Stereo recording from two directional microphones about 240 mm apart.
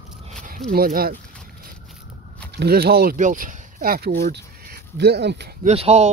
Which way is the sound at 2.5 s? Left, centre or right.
Right.